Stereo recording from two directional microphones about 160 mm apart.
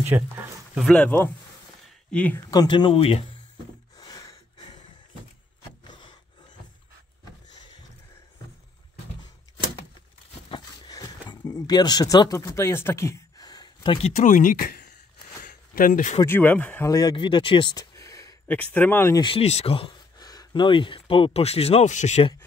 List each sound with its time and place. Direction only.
0.1 s speech: 20° right (ahead or behind)
0.7 s speech: 5° left (ahead or behind)
2.5 s speech: 25° left (ahead or behind)
4.0 s a sound: 20° left (ahead or behind)
7.5 s a sound: 25° left (ahead or behind)
10.5 s a sound: 25° left (ahead or behind)
14.0 s speech: 50° left (ahead or behind)
15.4 s a sound: 60° left (ahead or behind)
16.3 s speech: 10° left (ahead or behind)
16.9 s speech: 25° left (ahead or behind)
18.6 s speech: 10° left (ahead or behind)
19.2 s speech: 40° left (ahead or behind)